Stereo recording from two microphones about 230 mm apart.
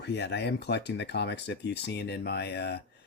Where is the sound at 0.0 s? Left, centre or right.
Left.